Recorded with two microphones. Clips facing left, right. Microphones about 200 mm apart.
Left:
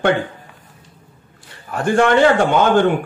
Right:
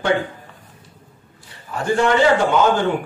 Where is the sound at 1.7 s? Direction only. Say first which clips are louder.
Left 3 dB; 55° left (ahead or behind).